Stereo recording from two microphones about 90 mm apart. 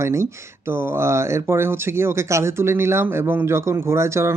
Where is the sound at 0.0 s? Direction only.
30° right (ahead or behind).